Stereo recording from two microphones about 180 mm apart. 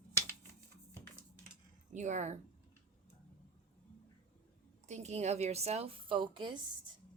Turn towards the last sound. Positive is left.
turn(degrees=-25)  # may be behind; listen again after turning